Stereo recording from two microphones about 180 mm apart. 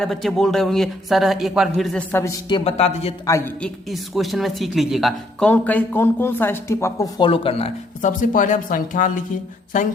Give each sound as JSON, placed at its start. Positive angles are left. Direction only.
{"t": 0.0, "sound": "speech", "side_deg": 0}
{"t": 3.2, "sound": "speech", "side_deg": 15}
{"t": 3.6, "sound": "speech", "side_deg": 0}
{"t": 7.2, "sound": "speech", "side_deg": 30}
{"t": 8.0, "sound": "speech", "side_deg": 45}